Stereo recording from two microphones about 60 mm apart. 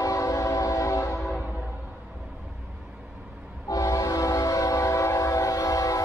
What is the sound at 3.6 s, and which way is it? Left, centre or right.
Train, left.